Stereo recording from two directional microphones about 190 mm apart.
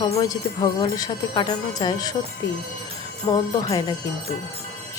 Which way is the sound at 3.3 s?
15° left (ahead or behind).